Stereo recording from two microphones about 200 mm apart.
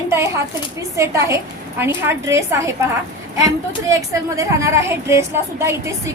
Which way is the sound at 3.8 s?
15° right (ahead or behind).